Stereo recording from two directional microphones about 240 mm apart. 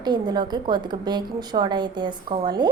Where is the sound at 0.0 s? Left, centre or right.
Centre.